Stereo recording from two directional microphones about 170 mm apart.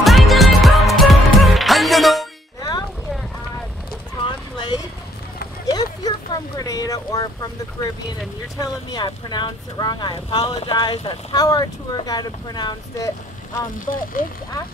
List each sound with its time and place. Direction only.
0.0 s music: centre (ahead or behind)
4.3 s a sound: 25° left (ahead or behind)
8.5 s speech: 25° left (ahead or behind)
13.7 s speech: 55° left (ahead or behind)